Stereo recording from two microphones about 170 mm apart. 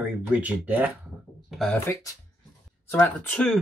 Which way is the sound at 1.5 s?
Centre (ahead or behind).